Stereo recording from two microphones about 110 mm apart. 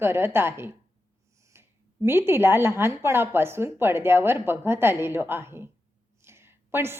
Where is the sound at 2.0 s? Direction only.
20° right (ahead or behind).